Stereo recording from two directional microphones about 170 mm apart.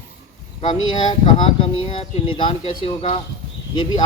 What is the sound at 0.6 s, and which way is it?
Speech, 30° left (ahead or behind).